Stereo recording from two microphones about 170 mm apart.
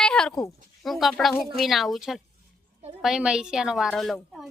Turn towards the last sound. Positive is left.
turn(degrees=0)  # may be behind; listen again after turning